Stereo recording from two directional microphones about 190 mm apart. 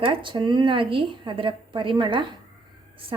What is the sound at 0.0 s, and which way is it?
Speech, 25° right (ahead or behind).